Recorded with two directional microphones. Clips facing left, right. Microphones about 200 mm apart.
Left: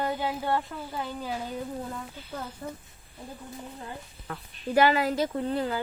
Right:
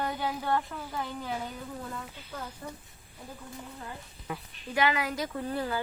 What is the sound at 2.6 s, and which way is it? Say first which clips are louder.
Speech: left 4 dB; 25° left (ahead or behind).